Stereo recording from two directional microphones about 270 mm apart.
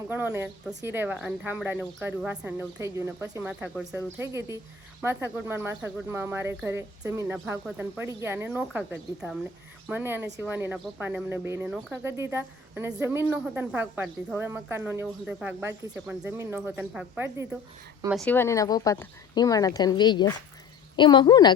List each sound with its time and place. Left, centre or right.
0.1 s speech: centre
18.3 s a woman's voice: centre